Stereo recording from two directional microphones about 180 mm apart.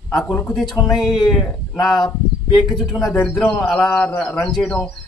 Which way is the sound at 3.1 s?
15° left (ahead or behind).